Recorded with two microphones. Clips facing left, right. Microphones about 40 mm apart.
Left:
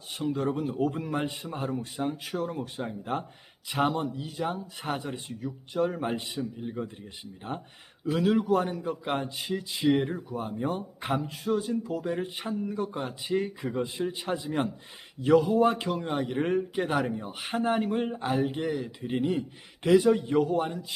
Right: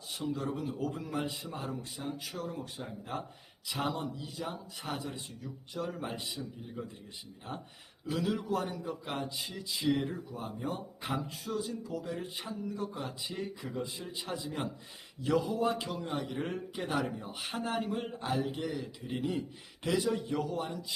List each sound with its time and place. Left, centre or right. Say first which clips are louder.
0.1 s speech: left 6 dB; left
16.6 s speech: left 7 dB; left